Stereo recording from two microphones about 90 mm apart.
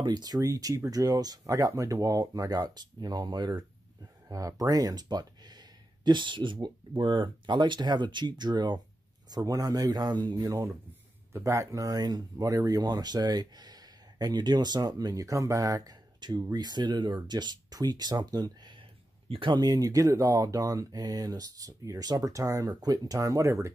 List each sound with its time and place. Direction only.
0.0 s speech: 50° right (ahead or behind)
0.4 s speech: 40° right (ahead or behind)
4.3 s speech: 40° right (ahead or behind)
9.3 s speech: 45° right (ahead or behind)
11.3 s speech: 30° right (ahead or behind); by 18.8 s 50° right (ahead or behind)
19.2 s speech: 80° right
19.5 s speech: 45° right (ahead or behind)